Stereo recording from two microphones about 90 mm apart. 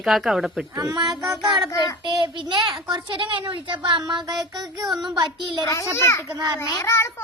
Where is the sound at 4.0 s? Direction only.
50° right (ahead or behind).